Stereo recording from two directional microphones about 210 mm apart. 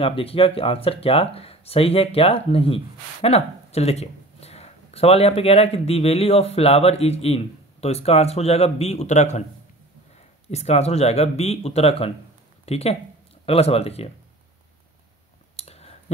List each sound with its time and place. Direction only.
0.0 s speech: 25° left (ahead or behind)
10.5 s speech: 30° left (ahead or behind)
15.5 s a sound: 30° left (ahead or behind)